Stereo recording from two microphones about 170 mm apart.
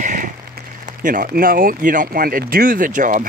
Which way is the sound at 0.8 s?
50° right (ahead or behind).